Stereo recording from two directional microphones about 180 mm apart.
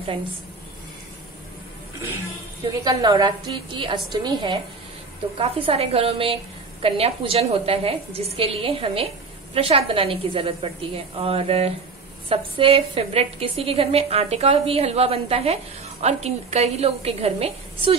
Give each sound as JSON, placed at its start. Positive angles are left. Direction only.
{"t": 2.8, "sound": "a woman's voice", "side_deg": -25}